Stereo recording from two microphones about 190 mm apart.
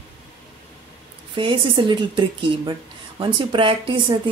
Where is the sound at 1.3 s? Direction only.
25° right (ahead or behind).